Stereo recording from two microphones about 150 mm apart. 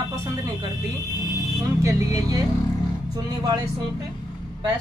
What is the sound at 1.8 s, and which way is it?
Speech, 20° right (ahead or behind).